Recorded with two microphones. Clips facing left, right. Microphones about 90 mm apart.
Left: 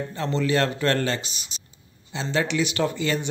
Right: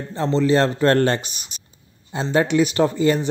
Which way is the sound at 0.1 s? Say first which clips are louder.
Right 7 dB; 25° right (ahead or behind).